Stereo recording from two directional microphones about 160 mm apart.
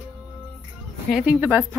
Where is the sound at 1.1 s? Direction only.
5° right (ahead or behind).